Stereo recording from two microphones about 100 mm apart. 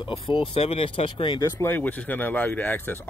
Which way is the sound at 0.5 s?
75° left (ahead or behind).